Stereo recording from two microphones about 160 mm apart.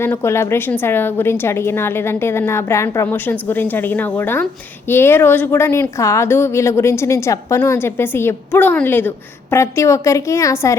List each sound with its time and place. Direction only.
0.0 s a woman's voice: 15° left (ahead or behind)